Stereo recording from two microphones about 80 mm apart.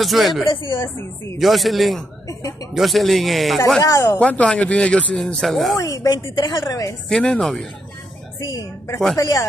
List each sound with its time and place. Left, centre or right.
0.0 s speech: centre
0.5 s a woman's voice: left
0.7 s speech: left
1.4 s speech: centre
2.2 s speech: left
2.7 s speech: centre
3.8 s speech: left
4.2 s speech: centre
5.8 s speech: left
6.3 s a woman's voice: left
6.7 s speech: left
7.1 s speech: centre
8.4 s a woman's voice: left